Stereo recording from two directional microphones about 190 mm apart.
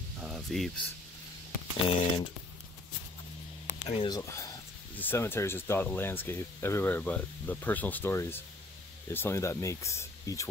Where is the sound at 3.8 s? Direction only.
25° left (ahead or behind).